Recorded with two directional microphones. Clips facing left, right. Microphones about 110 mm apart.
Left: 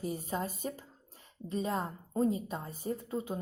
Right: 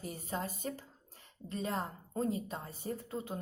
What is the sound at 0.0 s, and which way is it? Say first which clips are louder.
Speech: left 4 dB; 15° left (ahead or behind).